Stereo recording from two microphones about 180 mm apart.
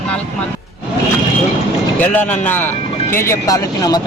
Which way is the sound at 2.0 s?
10° left (ahead or behind).